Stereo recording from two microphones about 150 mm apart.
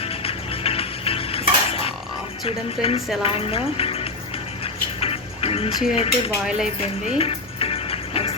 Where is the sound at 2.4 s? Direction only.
40° left (ahead or behind).